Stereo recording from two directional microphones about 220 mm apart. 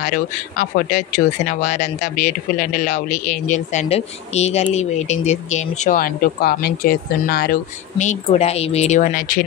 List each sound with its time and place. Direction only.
0.0 s speech: 40° left (ahead or behind)
8.0 s speech: 30° left (ahead or behind)